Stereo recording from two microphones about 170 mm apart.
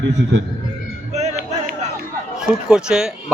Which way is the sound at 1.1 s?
40° right (ahead or behind).